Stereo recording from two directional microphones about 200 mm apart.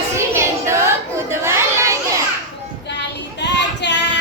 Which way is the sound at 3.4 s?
60° left (ahead or behind).